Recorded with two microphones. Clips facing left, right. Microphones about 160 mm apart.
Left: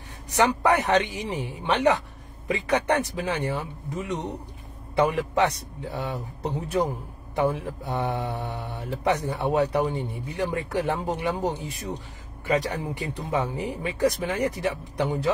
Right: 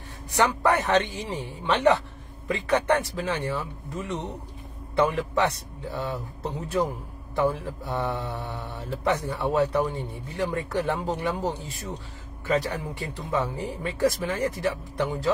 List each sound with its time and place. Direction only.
0.6 s speech: 15° left (ahead or behind)
5.4 s speech: 15° left (ahead or behind)